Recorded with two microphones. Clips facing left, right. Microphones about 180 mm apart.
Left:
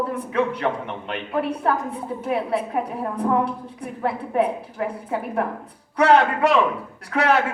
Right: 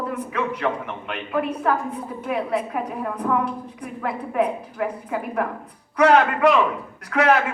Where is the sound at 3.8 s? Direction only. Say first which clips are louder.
Left 3 dB; 30° left (ahead or behind).